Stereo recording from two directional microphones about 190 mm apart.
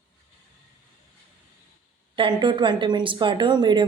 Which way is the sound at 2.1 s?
25° right (ahead or behind).